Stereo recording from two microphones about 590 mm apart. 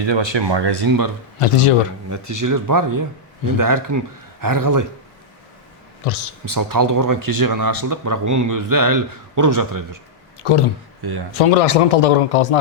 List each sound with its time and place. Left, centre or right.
0.0 s speech: right
1.4 s a man's voice: left
2.0 s speech: right
6.0 s speech: left
6.4 s speech: right
10.4 s a man's voice: left
11.3 s speech: left